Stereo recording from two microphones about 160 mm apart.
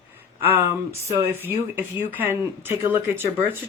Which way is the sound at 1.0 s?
15° right (ahead or behind).